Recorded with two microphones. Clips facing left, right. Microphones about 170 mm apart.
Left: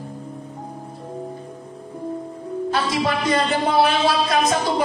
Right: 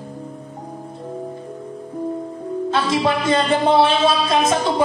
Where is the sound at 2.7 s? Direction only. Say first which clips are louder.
Right 3 dB; 25° right (ahead or behind).